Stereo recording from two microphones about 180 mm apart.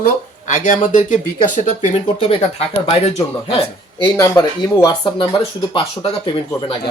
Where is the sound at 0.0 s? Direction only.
45° left (ahead or behind).